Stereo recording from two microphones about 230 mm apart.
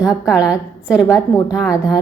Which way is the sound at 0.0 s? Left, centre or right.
Centre.